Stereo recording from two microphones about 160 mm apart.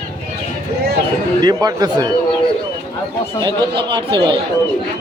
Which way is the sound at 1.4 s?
25° right (ahead or behind).